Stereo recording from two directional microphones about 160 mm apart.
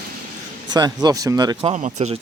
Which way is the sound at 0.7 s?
25° right (ahead or behind).